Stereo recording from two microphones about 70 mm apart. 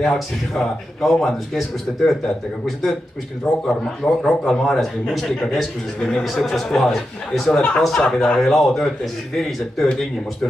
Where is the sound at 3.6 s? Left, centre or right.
Centre.